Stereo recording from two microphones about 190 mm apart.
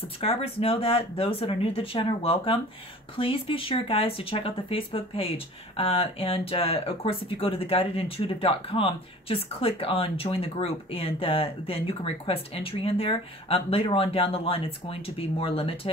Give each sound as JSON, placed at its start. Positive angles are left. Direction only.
{"t": 0.2, "sound": "speech", "side_deg": 30}